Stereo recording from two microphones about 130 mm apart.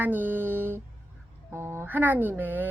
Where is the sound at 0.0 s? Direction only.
15° right (ahead or behind).